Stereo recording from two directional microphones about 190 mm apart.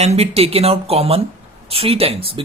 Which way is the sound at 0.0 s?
35° right (ahead or behind).